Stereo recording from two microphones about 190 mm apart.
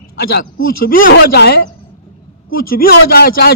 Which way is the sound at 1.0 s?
60° left (ahead or behind).